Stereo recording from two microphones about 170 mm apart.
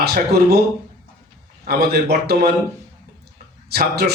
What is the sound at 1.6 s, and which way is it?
Speech, 65° right (ahead or behind).